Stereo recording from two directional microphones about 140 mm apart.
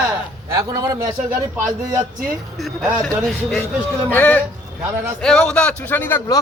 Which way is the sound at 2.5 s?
5° left (ahead or behind).